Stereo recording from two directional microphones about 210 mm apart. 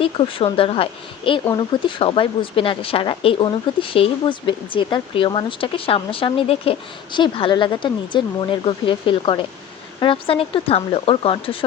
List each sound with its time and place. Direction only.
0.0 s speech: 25° left (ahead or behind)